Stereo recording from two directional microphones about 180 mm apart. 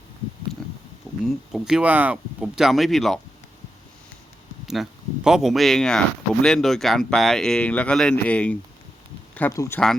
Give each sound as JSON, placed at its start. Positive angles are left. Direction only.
{"t": 1.2, "sound": "speech", "side_deg": 0}
{"t": 4.6, "sound": "speech", "side_deg": 0}